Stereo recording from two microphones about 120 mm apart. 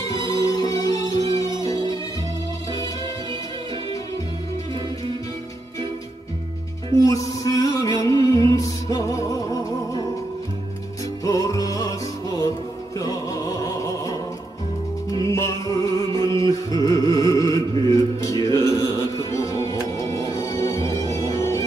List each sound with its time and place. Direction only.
0.1 s music: 30° left (ahead or behind)
7.1 s music: 30° left (ahead or behind)
11.2 s music: 30° left (ahead or behind)
15.1 s music: 25° left (ahead or behind)